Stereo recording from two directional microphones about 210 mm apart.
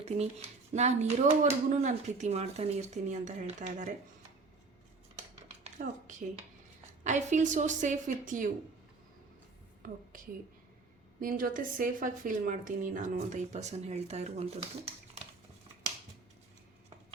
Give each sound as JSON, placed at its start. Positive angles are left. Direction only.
{"t": 0.0, "sound": "speech", "side_deg": -30}
{"t": 5.1, "sound": "a sound", "side_deg": -30}
{"t": 7.0, "sound": "speech", "side_deg": -35}
{"t": 9.8, "sound": "speech", "side_deg": -40}